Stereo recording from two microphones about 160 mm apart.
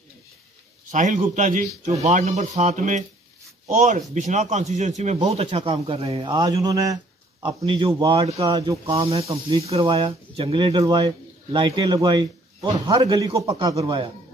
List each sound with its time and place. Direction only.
0.9 s a man's voice: 50° right (ahead or behind); by 14.1 s 35° right (ahead or behind)